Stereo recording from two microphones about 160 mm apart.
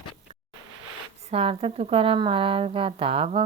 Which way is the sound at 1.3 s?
35° right (ahead or behind).